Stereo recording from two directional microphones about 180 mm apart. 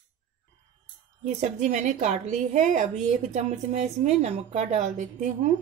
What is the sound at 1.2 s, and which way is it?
A woman's voice, 40° right (ahead or behind).